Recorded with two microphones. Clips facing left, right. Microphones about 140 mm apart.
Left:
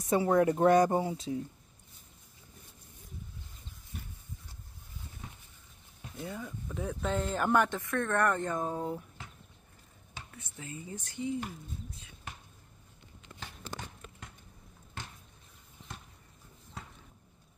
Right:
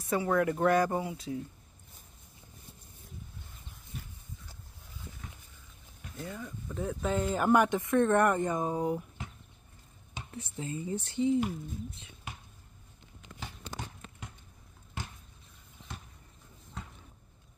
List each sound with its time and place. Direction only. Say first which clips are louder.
0.1 s speech: left 3 dB; 30° left (ahead or behind)
6.1 s speech: left 1 dB; 5° left (ahead or behind); by 7.8 s 10° right (ahead or behind)
7.8 s speech: right 5 dB; 25° right (ahead or behind)
10.3 s speech: right 8 dB; 30° right (ahead or behind)
15.0 s a sound: right 3 dB; 10° right (ahead or behind)